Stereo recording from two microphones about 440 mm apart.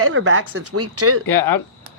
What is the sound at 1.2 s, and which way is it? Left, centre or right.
Speech, left.